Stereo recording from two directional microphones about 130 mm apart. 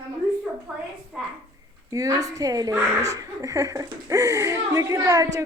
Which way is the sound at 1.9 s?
25° right (ahead or behind).